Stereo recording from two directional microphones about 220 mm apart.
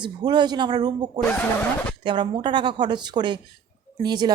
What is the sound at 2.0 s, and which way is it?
Speech, 20° right (ahead or behind).